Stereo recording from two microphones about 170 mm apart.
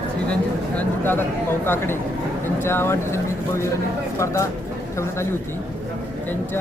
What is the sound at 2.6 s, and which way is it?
Speech, 15° left (ahead or behind).